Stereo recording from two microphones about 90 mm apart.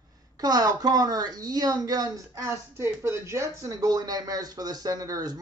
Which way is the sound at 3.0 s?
30° right (ahead or behind).